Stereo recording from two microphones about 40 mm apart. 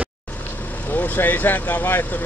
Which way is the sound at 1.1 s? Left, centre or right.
Left.